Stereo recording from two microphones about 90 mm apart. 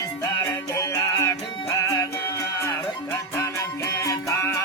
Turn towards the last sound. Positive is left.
turn(degrees=30)  # may be behind; listen again after turning